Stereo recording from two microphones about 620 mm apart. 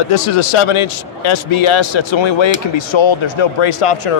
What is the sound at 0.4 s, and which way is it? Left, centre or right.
A man's voice, left.